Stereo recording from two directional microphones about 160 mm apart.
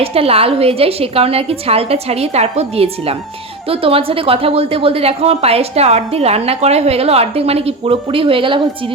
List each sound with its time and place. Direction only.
0.0 s a woman's voice: 40° right (ahead or behind)